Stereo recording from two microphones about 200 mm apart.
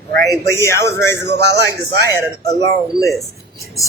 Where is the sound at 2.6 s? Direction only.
15° left (ahead or behind).